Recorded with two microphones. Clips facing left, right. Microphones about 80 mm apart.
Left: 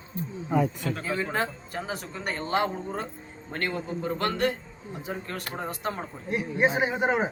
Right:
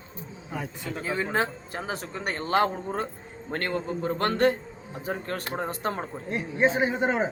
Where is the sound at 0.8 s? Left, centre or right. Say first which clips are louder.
Even; right.